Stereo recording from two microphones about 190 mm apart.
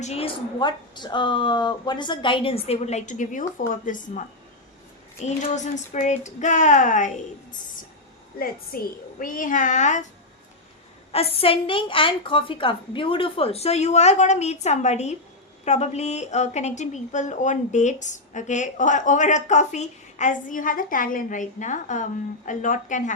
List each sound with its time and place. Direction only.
0.0 s a woman's voice: 30° left (ahead or behind)
5.2 s a woman's voice: 40° left (ahead or behind)
8.4 s a woman's voice: 50° left (ahead or behind)
11.1 s a woman's voice: 30° left (ahead or behind)